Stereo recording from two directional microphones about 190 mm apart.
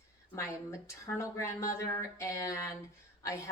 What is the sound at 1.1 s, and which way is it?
A woman's voice, 15° left (ahead or behind).